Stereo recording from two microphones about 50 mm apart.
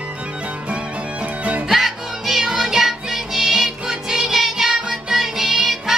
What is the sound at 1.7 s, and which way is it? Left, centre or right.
Music, centre.